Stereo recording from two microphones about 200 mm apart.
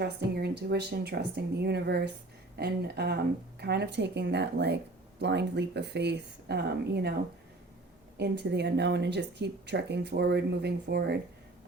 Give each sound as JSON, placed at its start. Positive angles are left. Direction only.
{"t": 0.0, "sound": "a woman's voice", "side_deg": -55}
{"t": 8.2, "sound": "a woman's voice", "side_deg": -60}